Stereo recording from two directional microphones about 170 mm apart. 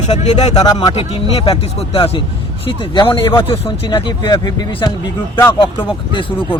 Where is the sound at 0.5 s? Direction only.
20° left (ahead or behind).